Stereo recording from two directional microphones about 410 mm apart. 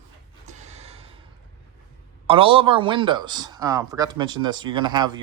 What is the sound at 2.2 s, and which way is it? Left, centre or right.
A man's voice, centre.